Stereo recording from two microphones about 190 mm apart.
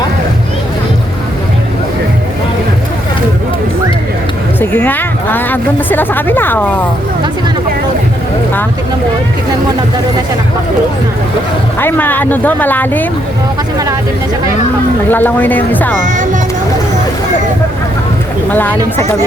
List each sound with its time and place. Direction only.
4.6 s a woman's voice: 10° left (ahead or behind)
11.8 s a woman's voice: 10° left (ahead or behind)
15.1 s a woman's voice: 10° left (ahead or behind)
16.0 s speech: 40° right (ahead or behind)
18.5 s a woman's voice: 10° left (ahead or behind)